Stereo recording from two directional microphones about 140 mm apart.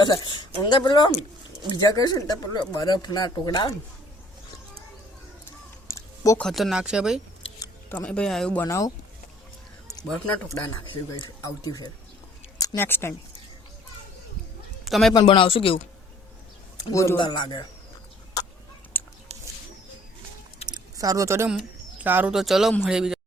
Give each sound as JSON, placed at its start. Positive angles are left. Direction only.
{"t": 0.0, "sound": "speech", "side_deg": 35}
{"t": 5.9, "sound": "a sound", "side_deg": 20}
{"t": 6.4, "sound": "speech", "side_deg": 0}
{"t": 7.9, "sound": "speech", "side_deg": 10}
{"t": 8.6, "sound": "speech", "side_deg": 25}
{"t": 11.2, "sound": "speech", "side_deg": 30}
{"t": 14.8, "sound": "a man's voice", "side_deg": 0}
{"t": 15.2, "sound": "speech", "side_deg": 40}
{"t": 16.9, "sound": "speech", "side_deg": 20}
{"t": 17.2, "sound": "speech", "side_deg": 35}
{"t": 18.9, "sound": "a sound", "side_deg": 10}
{"t": 20.7, "sound": "a sound", "side_deg": -30}
{"t": 21.9, "sound": "speech", "side_deg": -15}
{"t": 22.4, "sound": "speech", "side_deg": 0}